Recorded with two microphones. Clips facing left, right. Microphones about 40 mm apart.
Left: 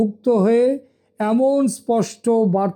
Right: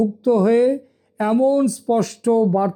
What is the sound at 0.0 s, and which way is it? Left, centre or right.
Speech, centre.